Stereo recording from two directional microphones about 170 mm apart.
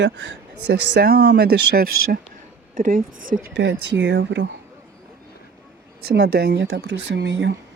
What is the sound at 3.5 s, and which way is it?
Speech, 90° right.